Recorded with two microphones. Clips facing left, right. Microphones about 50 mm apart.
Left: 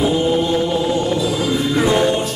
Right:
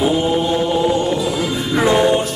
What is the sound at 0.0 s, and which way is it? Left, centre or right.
Chant, centre.